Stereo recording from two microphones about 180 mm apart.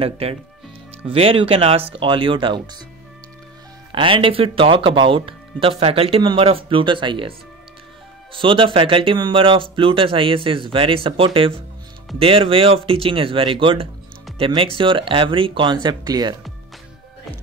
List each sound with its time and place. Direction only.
0.0 s speech: 35° right (ahead or behind)
3.9 s speech: 30° right (ahead or behind)